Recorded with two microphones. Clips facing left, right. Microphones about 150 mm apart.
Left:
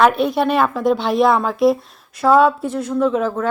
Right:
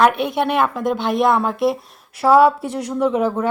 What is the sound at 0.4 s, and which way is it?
Speech, 15° right (ahead or behind).